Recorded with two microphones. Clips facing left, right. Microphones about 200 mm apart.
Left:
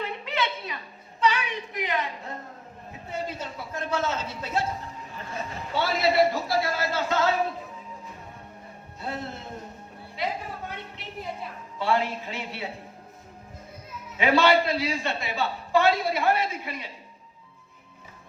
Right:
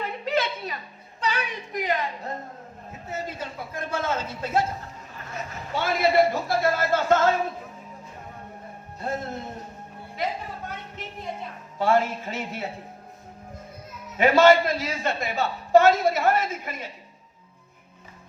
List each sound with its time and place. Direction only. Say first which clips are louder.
0.3 s a sound: right 6 dB; 40° right (ahead or behind)
1.2 s a woman's voice: left 3 dB; 40° right (ahead or behind)
3.8 s a man's voice: even; 50° right (ahead or behind)
5.7 s a man's voice: right 2 dB; 50° right (ahead or behind)
9.0 s a man's voice: right 4 dB; 45° right (ahead or behind)
11.8 s a man's voice: right 4 dB; 45° right (ahead or behind)
14.2 s a man's voice: right 4 dB; 45° right (ahead or behind)